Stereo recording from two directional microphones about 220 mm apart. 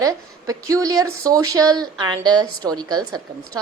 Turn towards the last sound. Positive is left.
turn(degrees=-15)  # may be behind; listen again after turning